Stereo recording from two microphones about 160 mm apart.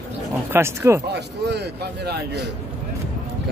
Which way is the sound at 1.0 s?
90° right.